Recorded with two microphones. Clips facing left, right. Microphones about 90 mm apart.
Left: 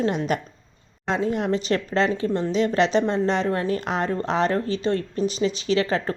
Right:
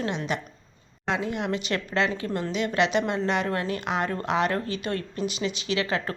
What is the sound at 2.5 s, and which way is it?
Speech, 35° left (ahead or behind).